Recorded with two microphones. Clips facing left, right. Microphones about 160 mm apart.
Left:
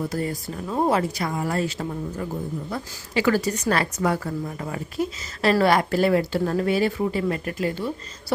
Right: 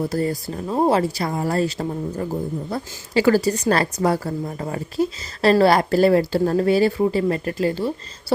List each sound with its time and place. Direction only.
0.0 s speech: 35° right (ahead or behind)